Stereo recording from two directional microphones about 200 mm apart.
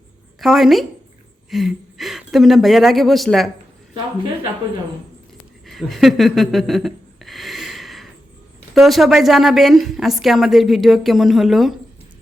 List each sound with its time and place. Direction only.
0.3 s a woman's voice: centre (ahead or behind)
5.6 s a sound: centre (ahead or behind)
8.7 s a woman's voice: centre (ahead or behind)